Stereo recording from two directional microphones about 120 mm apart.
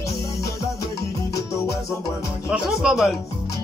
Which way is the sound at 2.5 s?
5° right (ahead or behind).